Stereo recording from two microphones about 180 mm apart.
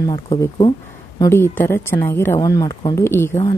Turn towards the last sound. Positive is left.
turn(degrees=15)  # may be behind; listen again after turning